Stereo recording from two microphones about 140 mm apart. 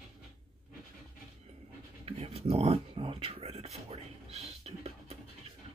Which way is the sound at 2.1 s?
45° right (ahead or behind).